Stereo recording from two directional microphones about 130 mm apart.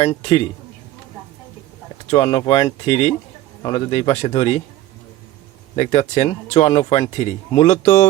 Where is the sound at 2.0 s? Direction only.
45° left (ahead or behind).